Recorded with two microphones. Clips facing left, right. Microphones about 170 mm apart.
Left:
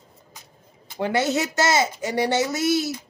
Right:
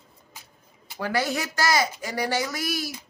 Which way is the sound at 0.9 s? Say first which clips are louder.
Left 4 dB; 25° left (ahead or behind).